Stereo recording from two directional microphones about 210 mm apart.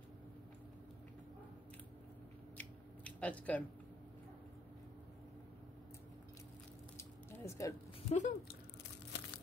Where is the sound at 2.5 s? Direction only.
5° left (ahead or behind).